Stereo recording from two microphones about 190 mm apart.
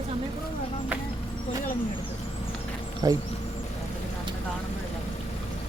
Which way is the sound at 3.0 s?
20° right (ahead or behind).